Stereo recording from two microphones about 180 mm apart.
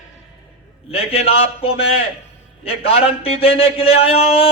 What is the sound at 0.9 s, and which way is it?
A man's voice, 35° left (ahead or behind).